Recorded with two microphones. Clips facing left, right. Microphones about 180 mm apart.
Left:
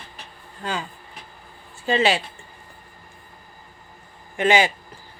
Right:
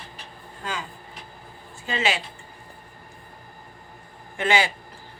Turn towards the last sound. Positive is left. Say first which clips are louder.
# left 4 dB
turn(degrees=20)  # may be behind; listen again after turning